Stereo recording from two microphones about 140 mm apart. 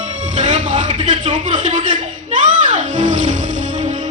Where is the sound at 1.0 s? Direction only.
65° right (ahead or behind).